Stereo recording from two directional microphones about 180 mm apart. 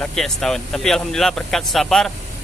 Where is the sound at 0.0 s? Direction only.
Centre (ahead or behind).